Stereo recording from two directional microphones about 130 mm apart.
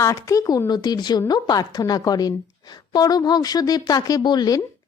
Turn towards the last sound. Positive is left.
turn(degrees=30)  # may be behind; listen again after turning